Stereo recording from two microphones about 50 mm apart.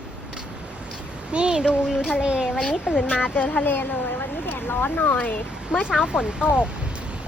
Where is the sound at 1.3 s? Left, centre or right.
Centre.